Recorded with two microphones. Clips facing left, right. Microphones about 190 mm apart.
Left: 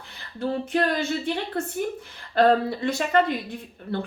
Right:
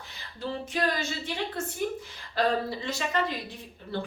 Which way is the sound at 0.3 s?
55° left (ahead or behind).